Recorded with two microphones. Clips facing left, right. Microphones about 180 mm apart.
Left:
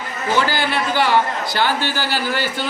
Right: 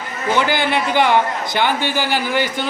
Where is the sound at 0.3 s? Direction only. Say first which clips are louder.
Right 2 dB; 20° right (ahead or behind).